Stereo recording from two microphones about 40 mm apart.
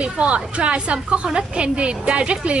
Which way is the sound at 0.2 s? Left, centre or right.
Right.